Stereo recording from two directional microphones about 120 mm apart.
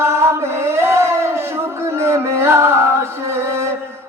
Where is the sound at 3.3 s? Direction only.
20° right (ahead or behind).